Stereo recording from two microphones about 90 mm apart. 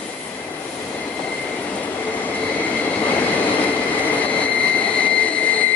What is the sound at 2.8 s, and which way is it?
Train, 15° left (ahead or behind).